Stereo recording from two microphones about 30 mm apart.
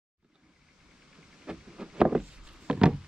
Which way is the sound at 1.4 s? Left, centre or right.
Right.